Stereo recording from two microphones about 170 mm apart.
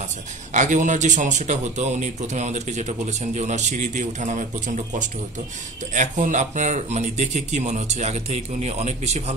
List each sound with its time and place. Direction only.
0.5 s a man's voice: 45° right (ahead or behind)